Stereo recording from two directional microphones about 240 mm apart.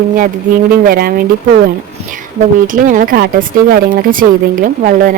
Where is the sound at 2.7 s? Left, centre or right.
Right.